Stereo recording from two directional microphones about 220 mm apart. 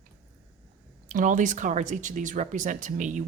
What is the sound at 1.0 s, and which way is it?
Speech, 35° right (ahead or behind).